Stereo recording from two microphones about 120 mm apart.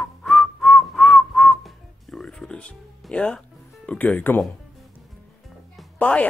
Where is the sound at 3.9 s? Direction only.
15° left (ahead or behind).